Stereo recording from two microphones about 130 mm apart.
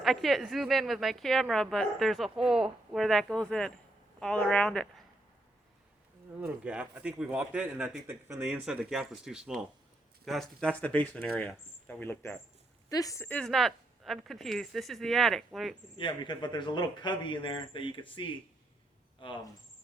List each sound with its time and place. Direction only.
0.0 s a woman's voice: centre (ahead or behind)
6.4 s a man's voice: 10° right (ahead or behind); by 13.2 s 25° left (ahead or behind)
13.2 s a woman's voice: 5° left (ahead or behind)
16.0 s speech: 35° left (ahead or behind)
19.2 s speech: 40° left (ahead or behind)